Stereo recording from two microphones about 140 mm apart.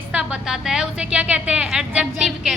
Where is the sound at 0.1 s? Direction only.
5° right (ahead or behind).